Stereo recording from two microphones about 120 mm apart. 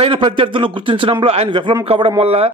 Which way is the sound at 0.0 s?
45° right (ahead or behind).